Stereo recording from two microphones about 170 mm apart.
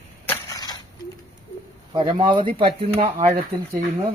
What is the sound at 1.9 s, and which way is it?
Speech, 30° right (ahead or behind).